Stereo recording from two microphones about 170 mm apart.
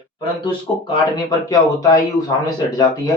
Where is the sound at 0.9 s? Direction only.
20° left (ahead or behind).